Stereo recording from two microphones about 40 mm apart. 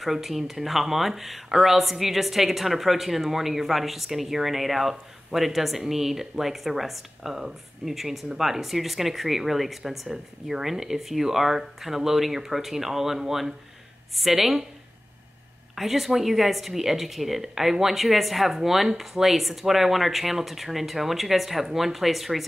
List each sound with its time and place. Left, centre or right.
0.0 s speech: centre
15.7 s speech: centre